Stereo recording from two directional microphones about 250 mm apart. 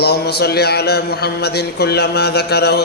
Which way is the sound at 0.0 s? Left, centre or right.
Left.